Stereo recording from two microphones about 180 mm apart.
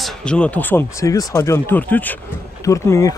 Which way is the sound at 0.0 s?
5° left (ahead or behind).